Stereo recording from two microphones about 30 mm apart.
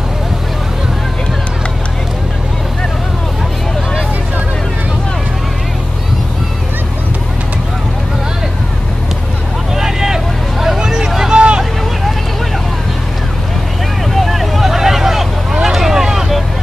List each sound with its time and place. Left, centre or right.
9.8 s vehicle: centre
10.8 s hubbub: right
11.3 s hubbub: right
14.1 s vehicle: centre